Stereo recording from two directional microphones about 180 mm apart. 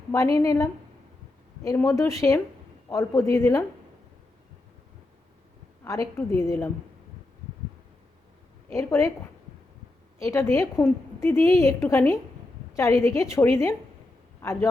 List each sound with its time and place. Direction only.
0.1 s a woman's voice: 15° left (ahead or behind)
5.8 s a woman's voice: 15° left (ahead or behind)
8.7 s a woman's voice: 15° left (ahead or behind)
10.2 s a woman's voice: 15° left (ahead or behind)